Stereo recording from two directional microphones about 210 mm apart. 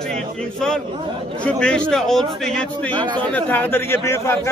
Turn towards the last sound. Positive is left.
turn(degrees=10)  # may be behind; listen again after turning